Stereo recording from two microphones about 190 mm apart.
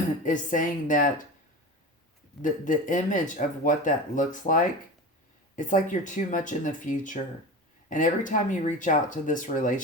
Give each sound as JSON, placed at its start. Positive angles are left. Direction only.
{"t": 0.2, "sound": "speech", "side_deg": 45}
{"t": 2.4, "sound": "speech", "side_deg": 45}